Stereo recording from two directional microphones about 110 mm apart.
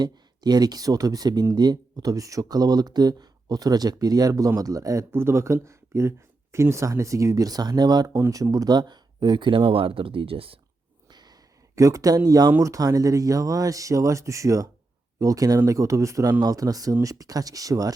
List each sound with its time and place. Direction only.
0.0 s speech: 40° right (ahead or behind); by 10.6 s 55° right (ahead or behind)
11.1 s a sound: 40° right (ahead or behind)
12.5 s speech: 25° right (ahead or behind)